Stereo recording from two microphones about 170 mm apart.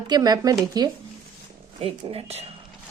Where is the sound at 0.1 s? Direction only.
20° right (ahead or behind).